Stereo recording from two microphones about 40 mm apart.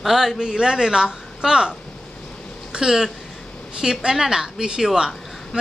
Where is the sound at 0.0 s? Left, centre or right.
Centre.